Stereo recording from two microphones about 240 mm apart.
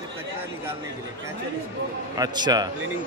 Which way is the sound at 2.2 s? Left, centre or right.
Centre.